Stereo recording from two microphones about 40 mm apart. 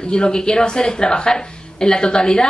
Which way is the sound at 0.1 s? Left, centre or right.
Centre.